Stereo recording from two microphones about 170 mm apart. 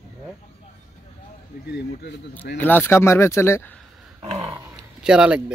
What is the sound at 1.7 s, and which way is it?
Speech, 80° left.